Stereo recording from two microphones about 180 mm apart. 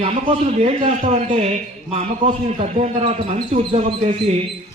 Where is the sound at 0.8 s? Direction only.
35° right (ahead or behind).